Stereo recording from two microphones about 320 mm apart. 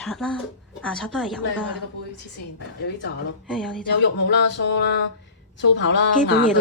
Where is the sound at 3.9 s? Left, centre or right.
Left.